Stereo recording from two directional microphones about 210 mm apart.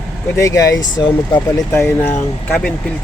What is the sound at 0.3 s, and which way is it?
Speech, 15° left (ahead or behind).